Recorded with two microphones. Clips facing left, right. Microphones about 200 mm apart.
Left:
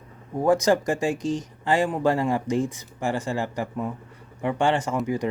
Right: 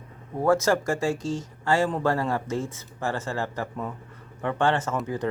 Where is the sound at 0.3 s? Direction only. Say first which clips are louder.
Left 2 dB; 15° left (ahead or behind).